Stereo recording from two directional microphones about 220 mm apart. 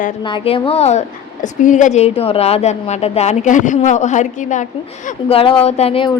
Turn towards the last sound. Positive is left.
turn(degrees=25)  # may be behind; listen again after turning